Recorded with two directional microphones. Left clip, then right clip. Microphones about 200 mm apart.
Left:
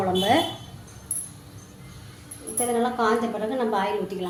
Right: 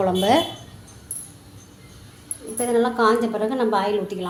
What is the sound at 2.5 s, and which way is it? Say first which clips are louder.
A woman's voice: right 4 dB; 35° right (ahead or behind).